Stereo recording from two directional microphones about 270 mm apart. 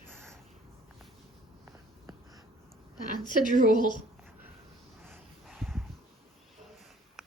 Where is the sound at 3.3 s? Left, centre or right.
Right.